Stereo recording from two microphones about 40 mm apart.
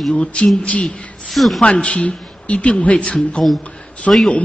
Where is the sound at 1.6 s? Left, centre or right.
Left.